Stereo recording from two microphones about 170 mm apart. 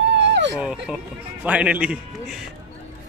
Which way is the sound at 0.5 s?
5° right (ahead or behind).